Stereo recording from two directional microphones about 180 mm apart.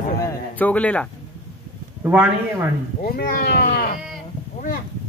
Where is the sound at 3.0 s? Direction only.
55° left (ahead or behind).